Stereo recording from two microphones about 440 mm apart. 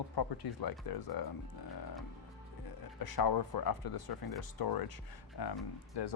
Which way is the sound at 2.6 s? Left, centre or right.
Left.